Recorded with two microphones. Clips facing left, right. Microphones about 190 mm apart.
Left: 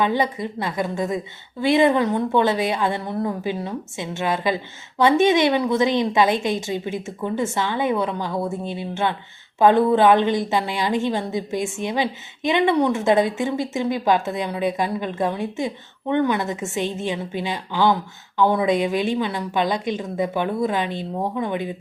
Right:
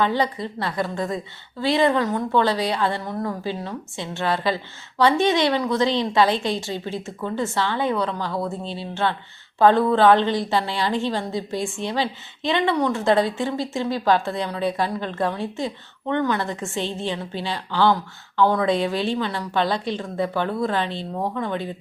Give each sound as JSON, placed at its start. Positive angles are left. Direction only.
{"t": 0.0, "sound": "a woman's voice", "side_deg": 20}